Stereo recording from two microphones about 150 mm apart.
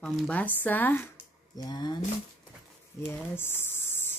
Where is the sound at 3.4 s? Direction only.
15° left (ahead or behind).